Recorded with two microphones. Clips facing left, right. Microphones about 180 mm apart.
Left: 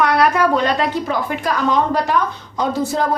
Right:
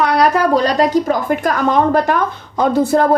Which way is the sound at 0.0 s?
35° right (ahead or behind).